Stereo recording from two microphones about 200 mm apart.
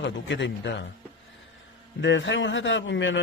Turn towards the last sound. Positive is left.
turn(degrees=65)  # may be behind; listen again after turning